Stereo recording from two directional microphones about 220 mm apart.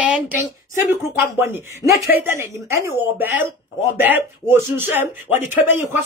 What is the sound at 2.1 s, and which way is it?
Speech, 10° right (ahead or behind).